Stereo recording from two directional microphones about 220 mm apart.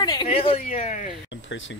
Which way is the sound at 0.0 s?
20° left (ahead or behind).